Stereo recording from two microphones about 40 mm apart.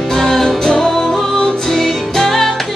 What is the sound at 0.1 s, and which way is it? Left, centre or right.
Music, centre.